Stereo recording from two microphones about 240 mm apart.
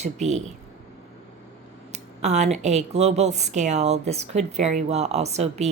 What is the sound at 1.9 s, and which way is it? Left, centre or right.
A woman's voice, right.